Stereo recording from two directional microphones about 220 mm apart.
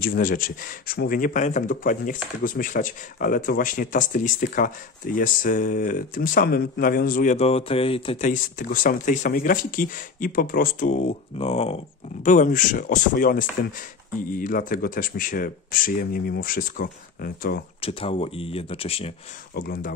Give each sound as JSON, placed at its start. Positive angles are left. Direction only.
{"t": 0.0, "sound": "speech", "side_deg": 40}
{"t": 8.3, "sound": "speech", "side_deg": 40}
{"t": 17.7, "sound": "speech", "side_deg": 25}
{"t": 19.5, "sound": "speech", "side_deg": 45}